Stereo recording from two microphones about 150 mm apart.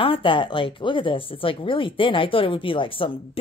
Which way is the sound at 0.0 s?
35° left (ahead or behind).